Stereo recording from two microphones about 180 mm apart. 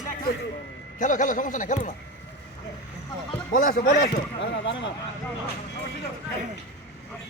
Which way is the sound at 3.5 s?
50° left (ahead or behind).